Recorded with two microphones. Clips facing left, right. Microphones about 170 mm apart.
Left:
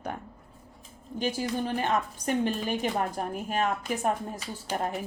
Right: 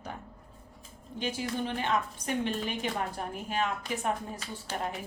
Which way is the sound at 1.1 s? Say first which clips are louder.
Left 4 dB; 40° left (ahead or behind).